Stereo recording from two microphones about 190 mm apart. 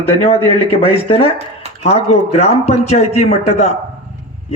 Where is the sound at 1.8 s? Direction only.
35° left (ahead or behind).